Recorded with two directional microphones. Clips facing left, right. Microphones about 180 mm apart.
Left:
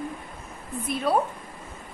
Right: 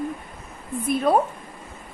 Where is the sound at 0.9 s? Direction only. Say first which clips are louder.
Right 5 dB; 50° right (ahead or behind).